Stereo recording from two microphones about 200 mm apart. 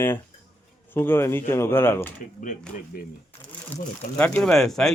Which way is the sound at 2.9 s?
50° left (ahead or behind).